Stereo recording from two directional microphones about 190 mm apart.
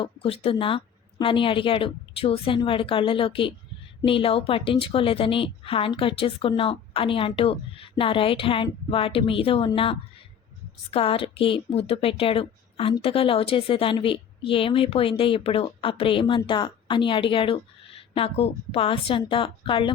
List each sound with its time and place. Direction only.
0.0 s a woman's voice: 30° left (ahead or behind)